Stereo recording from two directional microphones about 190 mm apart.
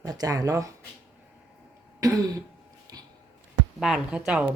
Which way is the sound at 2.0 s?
20° right (ahead or behind).